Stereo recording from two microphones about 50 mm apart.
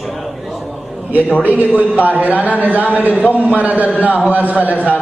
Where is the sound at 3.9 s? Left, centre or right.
Left.